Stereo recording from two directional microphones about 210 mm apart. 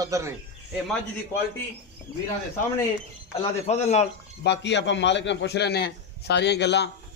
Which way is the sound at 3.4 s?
30° left (ahead or behind).